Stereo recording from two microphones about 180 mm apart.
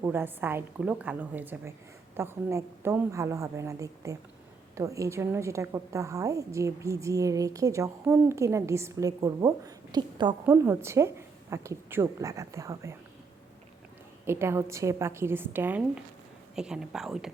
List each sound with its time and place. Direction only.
0.0 s a woman's voice: 10° right (ahead or behind)
10.4 s a woman's voice: 10° right (ahead or behind)
14.3 s a woman's voice: 15° right (ahead or behind)